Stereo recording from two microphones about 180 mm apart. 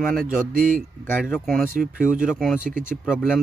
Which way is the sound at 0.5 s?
50° right (ahead or behind).